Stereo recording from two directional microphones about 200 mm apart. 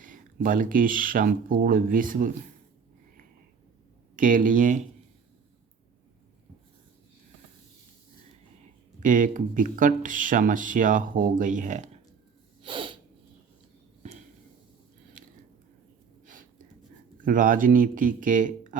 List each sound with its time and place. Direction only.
0.0 s speech: 40° right (ahead or behind)
4.1 s speech: 45° right (ahead or behind)
9.0 s speech: 40° right (ahead or behind)
12.6 s sneeze: 25° right (ahead or behind)
16.2 s a sound: 40° right (ahead or behind)
17.2 s speech: 40° right (ahead or behind)